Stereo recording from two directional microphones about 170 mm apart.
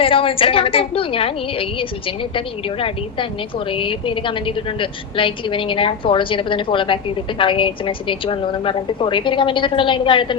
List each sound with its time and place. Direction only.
0.0 s a woman's voice: 30° left (ahead or behind)
3.7 s a woman's voice: 30° left (ahead or behind)